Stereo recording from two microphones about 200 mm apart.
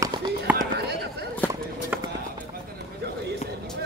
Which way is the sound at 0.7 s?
55° right (ahead or behind).